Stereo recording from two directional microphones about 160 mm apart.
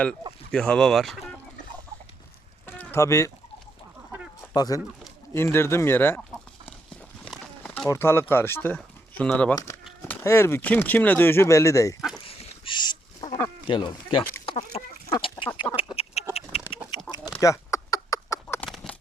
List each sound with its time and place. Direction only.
0.5 s speech: 5° left (ahead or behind)
2.6 s a sound: 15° left (ahead or behind)
4.4 s chicken: 20° left (ahead or behind)
5.3 s speech: 15° left (ahead or behind)
7.6 s a sound: 10° left (ahead or behind)
8.3 s speech: 15° left (ahead or behind)
12.2 s dog: 35° left (ahead or behind)
13.7 s speech: 30° left (ahead or behind)
14.4 s chicken: 40° left (ahead or behind)
15.6 s chicken: 10° left (ahead or behind)
16.6 s chicken: 10° right (ahead or behind)
17.1 s chicken: 25° left (ahead or behind)
18.4 s a sound: 10° left (ahead or behind)